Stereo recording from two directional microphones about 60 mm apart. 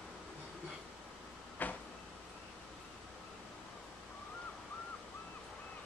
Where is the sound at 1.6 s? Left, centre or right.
Left.